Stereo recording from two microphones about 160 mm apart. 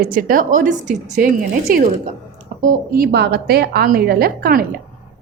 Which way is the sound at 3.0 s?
85° right.